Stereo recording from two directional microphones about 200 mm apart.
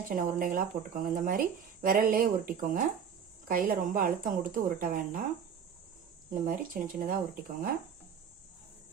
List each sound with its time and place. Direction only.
0.1 s speech: 45° right (ahead or behind)
6.3 s speech: 40° right (ahead or behind)